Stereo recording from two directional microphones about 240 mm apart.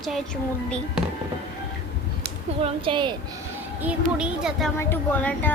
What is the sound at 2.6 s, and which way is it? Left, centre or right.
Speech, right.